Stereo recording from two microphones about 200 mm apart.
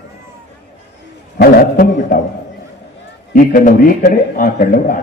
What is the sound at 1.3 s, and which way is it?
Speech, 55° left (ahead or behind).